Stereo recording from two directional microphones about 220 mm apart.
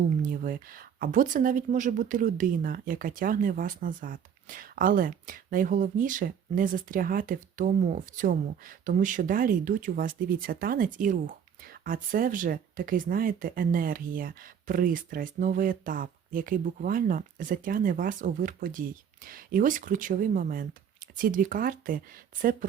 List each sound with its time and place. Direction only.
0.2 s speech: 40° right (ahead or behind)